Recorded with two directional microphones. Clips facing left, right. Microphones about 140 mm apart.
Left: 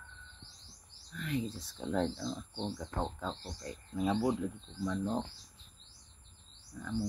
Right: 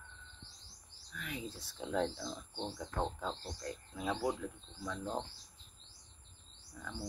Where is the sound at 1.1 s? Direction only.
5° right (ahead or behind).